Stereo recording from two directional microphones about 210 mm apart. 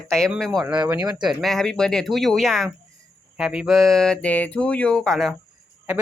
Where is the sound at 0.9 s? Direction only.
15° right (ahead or behind).